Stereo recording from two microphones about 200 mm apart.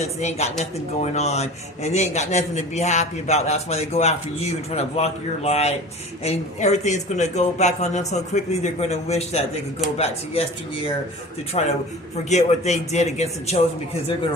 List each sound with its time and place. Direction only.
0.0 s a man's voice: 35° left (ahead or behind)
11.6 s a man's voice: 30° left (ahead or behind)